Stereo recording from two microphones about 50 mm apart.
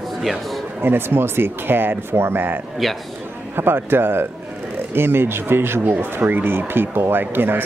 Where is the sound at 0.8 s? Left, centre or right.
Right.